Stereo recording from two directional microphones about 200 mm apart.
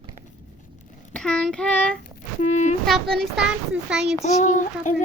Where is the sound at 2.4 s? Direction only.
35° left (ahead or behind).